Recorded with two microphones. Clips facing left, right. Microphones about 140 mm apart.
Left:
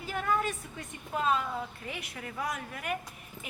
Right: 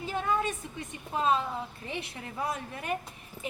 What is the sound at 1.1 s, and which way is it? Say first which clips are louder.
Speech: right 2 dB; 25° right (ahead or behind).